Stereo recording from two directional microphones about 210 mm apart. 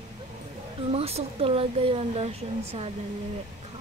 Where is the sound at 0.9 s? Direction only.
30° right (ahead or behind).